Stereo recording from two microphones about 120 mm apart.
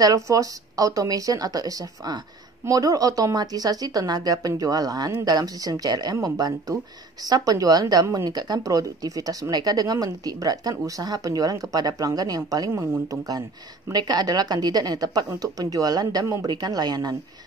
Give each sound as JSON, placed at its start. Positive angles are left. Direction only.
{"t": 0.0, "sound": "a woman's voice", "side_deg": -30}